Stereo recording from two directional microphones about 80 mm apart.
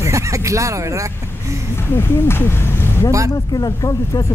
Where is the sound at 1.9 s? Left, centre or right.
Left.